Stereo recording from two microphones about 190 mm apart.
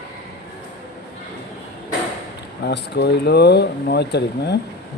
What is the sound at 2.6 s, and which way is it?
Speech, 65° left (ahead or behind).